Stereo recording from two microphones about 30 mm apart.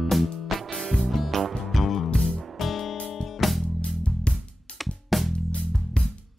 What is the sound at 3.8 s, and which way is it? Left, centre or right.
Music, left.